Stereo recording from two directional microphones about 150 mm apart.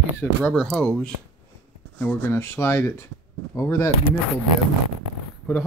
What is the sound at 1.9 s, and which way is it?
Speech, 15° left (ahead or behind).